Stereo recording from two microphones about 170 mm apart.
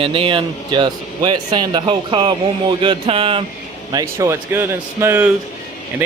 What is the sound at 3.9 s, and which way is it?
Speech, 20° right (ahead or behind).